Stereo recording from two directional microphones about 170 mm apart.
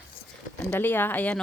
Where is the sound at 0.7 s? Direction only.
10° left (ahead or behind).